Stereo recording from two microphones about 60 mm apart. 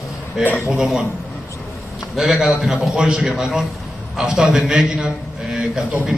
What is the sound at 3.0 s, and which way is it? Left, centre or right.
Speech, centre.